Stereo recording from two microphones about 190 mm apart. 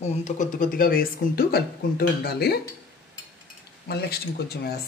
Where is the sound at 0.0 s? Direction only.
40° left (ahead or behind); by 2.7 s 55° left (ahead or behind).